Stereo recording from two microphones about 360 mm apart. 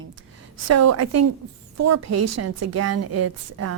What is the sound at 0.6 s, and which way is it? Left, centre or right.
A woman's voice, right.